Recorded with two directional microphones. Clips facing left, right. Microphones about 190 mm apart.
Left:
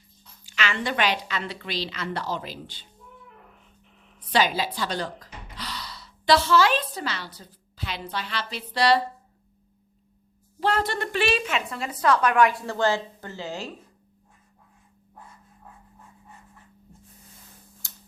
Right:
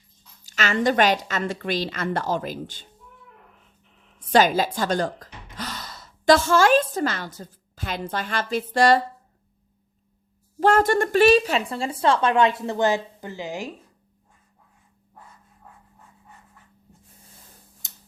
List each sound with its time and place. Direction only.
0.4 s a woman's voice: 40° right (ahead or behind)
4.3 s speech: 45° right (ahead or behind)
10.6 s a woman's voice: 50° right (ahead or behind); by 13.7 s 15° right (ahead or behind)
17.8 s tick-tock: 20° right (ahead or behind)